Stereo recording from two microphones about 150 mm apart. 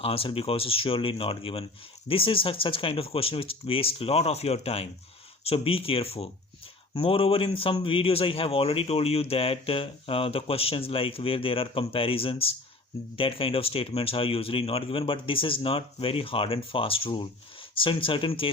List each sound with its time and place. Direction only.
0.0 s speech: 40° left (ahead or behind)